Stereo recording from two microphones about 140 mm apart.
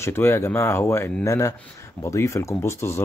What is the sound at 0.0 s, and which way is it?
Speech, 15° left (ahead or behind).